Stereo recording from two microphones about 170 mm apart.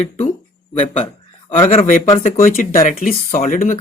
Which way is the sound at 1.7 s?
45° left (ahead or behind).